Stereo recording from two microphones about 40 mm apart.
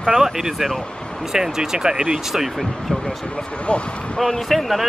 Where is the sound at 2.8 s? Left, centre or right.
Centre.